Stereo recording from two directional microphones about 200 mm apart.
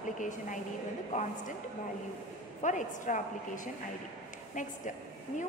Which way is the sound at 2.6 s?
40° left (ahead or behind).